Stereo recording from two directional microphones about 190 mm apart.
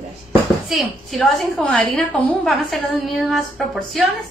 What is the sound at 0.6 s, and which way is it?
A woman's voice, centre (ahead or behind).